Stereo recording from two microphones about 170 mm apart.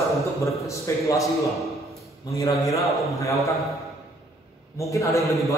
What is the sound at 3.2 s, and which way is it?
Speech, 20° left (ahead or behind).